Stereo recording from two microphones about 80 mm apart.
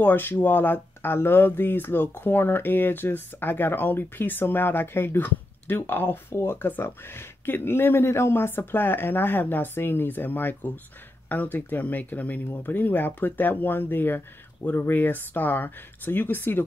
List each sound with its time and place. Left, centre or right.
0.0 s speech: left